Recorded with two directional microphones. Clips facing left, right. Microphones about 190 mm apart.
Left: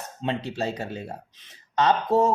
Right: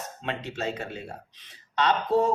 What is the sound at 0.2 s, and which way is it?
Speech, 30° left (ahead or behind).